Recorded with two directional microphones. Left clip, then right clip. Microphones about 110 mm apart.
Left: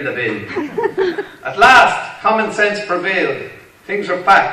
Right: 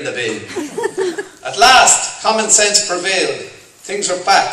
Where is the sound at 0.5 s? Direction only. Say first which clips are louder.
Left 2 dB; 10° right (ahead or behind).